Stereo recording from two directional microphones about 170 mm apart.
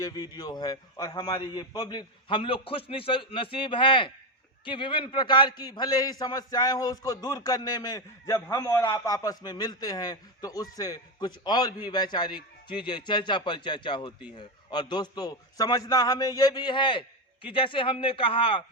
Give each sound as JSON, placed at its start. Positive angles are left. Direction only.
{"t": 0.0, "sound": "a man's voice", "side_deg": 20}